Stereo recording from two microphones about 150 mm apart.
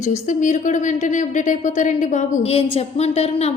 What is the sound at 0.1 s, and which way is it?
A woman's voice, 55° left (ahead or behind).